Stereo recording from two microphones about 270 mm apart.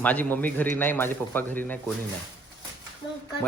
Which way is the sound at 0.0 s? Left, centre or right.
Centre.